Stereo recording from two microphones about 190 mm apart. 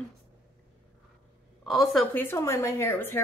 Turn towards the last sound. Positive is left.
turn(degrees=10)  # may be behind; listen again after turning